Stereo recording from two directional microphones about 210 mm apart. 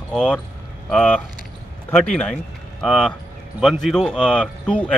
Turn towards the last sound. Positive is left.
turn(degrees=5)  # may be behind; listen again after turning